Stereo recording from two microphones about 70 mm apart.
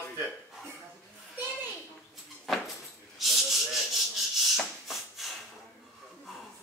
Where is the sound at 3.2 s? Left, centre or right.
Centre.